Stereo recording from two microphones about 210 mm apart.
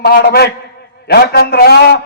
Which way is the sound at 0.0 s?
50° left (ahead or behind).